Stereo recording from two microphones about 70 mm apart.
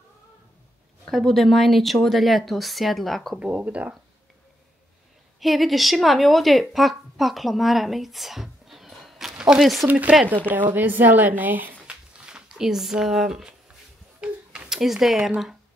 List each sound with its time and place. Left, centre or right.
1.1 s a woman's voice: centre
3.3 s a woman's voice: centre
5.4 s speech: centre
9.8 s a woman's voice: right
11.9 s a sound: centre
14.7 s a woman's voice: centre